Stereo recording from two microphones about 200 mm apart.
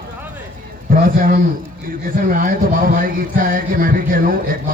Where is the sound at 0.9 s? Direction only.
45° right (ahead or behind).